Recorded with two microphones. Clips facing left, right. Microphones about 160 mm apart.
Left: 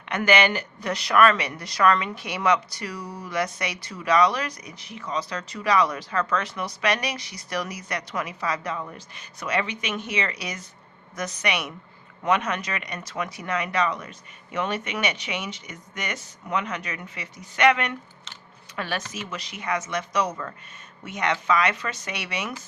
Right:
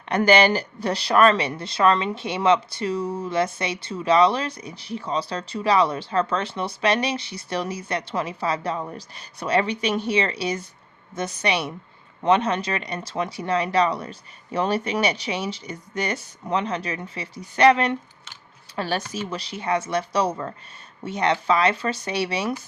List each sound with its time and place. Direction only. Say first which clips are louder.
0.1 s a woman's voice: right 4 dB; 35° right (ahead or behind)